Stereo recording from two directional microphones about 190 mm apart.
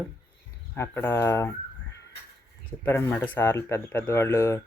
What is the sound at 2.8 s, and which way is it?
Speech, 10° left (ahead or behind).